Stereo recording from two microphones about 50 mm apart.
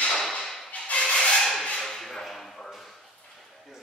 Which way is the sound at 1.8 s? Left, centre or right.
Centre.